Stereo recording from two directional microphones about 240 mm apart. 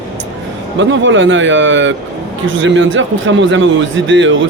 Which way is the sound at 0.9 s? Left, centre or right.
Right.